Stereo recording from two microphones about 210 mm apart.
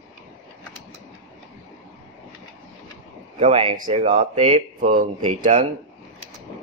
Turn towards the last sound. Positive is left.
turn(degrees=-35)  # may be behind; listen again after turning